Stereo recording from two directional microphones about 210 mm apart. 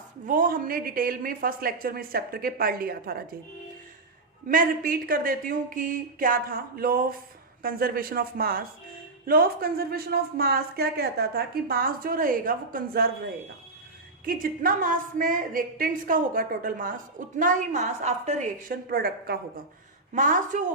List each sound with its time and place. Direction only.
0.3 s speech: 40° right (ahead or behind)
4.4 s a woman's voice: 40° right (ahead or behind)
14.3 s a woman's voice: 40° right (ahead or behind)